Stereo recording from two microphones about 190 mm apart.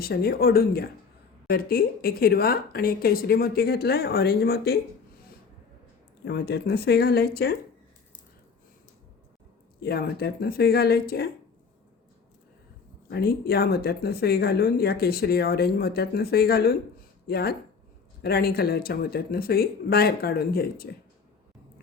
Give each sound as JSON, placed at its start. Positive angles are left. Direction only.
{"t": 0.0, "sound": "speech", "side_deg": 55}
{"t": 6.2, "sound": "speech", "side_deg": 60}
{"t": 9.8, "sound": "speech", "side_deg": 55}
{"t": 13.1, "sound": "speech", "side_deg": 55}